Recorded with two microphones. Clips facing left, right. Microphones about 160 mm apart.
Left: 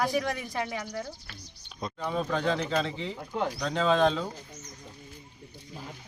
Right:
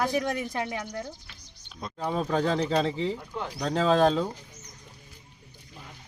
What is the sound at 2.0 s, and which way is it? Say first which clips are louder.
Speech: right 3 dB; 35° right (ahead or behind).